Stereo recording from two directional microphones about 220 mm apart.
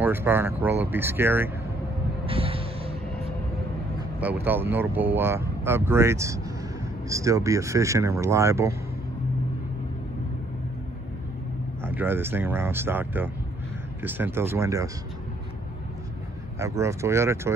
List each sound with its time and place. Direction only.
0.0 s speech: 10° right (ahead or behind)
2.2 s vehicle: 25° right (ahead or behind)
4.2 s speech: 10° right (ahead or behind)
11.8 s speech: 10° right (ahead or behind)
16.5 s speech: 15° right (ahead or behind)